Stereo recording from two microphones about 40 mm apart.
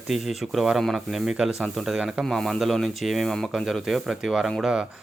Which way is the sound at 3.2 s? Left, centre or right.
Centre.